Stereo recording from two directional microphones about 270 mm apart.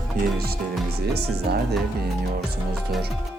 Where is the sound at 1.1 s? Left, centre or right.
Right.